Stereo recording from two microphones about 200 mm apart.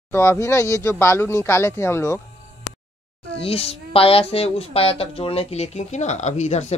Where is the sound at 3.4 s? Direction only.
30° left (ahead or behind).